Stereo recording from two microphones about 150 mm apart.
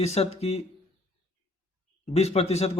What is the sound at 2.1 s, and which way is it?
Speech, 45° left (ahead or behind).